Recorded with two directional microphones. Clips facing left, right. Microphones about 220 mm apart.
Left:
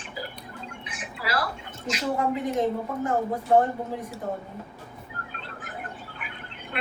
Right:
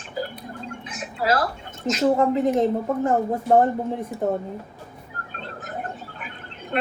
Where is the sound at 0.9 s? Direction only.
40° right (ahead or behind).